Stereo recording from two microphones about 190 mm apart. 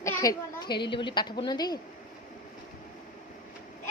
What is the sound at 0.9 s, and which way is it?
Speech, 25° left (ahead or behind).